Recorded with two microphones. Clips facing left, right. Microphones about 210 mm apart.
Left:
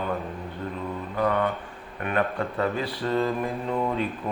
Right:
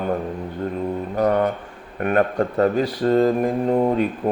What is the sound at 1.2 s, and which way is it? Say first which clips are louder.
Speech: right 5 dB; 40° right (ahead or behind).